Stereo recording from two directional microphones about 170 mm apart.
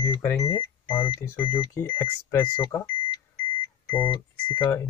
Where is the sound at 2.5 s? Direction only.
25° left (ahead or behind).